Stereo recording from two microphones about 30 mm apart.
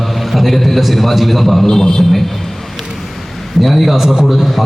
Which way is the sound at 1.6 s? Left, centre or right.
Centre.